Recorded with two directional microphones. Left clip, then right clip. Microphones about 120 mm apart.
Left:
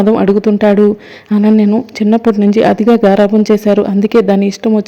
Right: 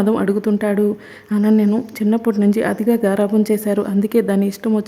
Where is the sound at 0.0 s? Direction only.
25° left (ahead or behind).